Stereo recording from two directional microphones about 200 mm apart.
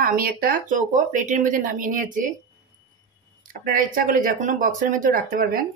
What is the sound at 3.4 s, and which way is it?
Speech, 45° right (ahead or behind).